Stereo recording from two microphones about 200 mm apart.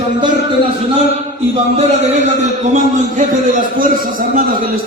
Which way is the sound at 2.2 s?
35° right (ahead or behind).